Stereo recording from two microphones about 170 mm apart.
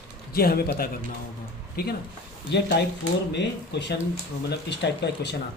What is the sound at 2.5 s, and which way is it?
Speech, 90° left.